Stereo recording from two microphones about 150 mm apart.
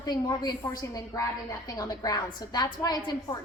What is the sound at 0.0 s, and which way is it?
A woman's voice, 25° left (ahead or behind).